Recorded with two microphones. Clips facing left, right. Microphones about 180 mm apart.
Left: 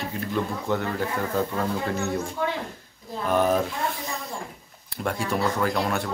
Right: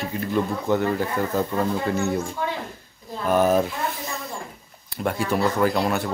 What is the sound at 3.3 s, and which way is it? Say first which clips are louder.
Speech: right 3 dB; 5° right (ahead or behind).